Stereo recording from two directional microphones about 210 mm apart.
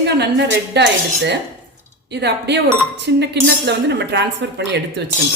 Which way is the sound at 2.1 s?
55° right (ahead or behind).